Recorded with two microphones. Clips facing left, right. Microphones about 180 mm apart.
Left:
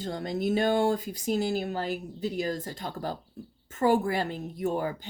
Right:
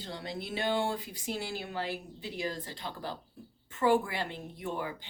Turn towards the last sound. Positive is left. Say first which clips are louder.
# left 7 dB
turn(degrees=40)  # may be behind; listen again after turning